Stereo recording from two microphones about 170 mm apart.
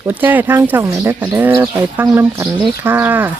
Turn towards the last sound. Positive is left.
turn(degrees=-10)  # may be behind; listen again after turning